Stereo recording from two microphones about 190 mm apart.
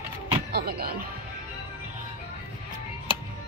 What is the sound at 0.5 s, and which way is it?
Speech, 55° right (ahead or behind).